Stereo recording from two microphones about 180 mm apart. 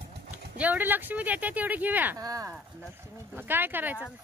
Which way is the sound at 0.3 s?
10° right (ahead or behind).